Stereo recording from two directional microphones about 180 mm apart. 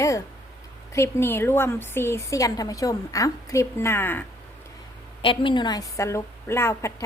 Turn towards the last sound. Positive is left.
turn(degrees=15)  # may be behind; listen again after turning